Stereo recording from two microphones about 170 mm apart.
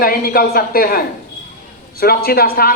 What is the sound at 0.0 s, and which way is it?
A man's voice, 60° left (ahead or behind).